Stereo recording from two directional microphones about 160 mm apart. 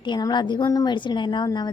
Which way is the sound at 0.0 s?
25° left (ahead or behind).